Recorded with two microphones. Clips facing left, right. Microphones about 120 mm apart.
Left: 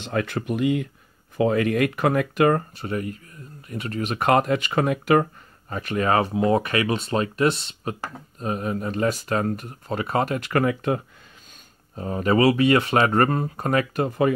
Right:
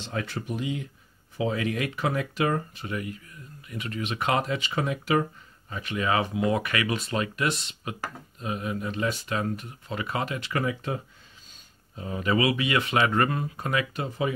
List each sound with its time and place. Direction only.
0.0 s speech: 60° left (ahead or behind)
2.8 s speech: 40° left (ahead or behind); by 5.2 s 55° left (ahead or behind)
5.7 s speech: 45° left (ahead or behind)
8.4 s speech: 45° left (ahead or behind); by 11.0 s 60° left (ahead or behind)
11.9 s speech: 40° left (ahead or behind)